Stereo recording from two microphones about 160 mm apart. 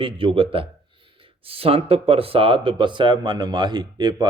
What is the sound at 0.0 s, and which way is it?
Speech, 35° right (ahead or behind).